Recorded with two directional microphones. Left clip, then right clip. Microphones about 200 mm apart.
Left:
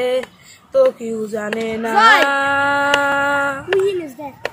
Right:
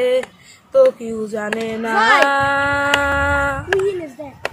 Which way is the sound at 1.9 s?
60° left (ahead or behind).